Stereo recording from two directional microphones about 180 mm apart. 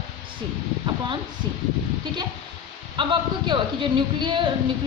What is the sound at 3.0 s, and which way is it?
Speech, 25° right (ahead or behind).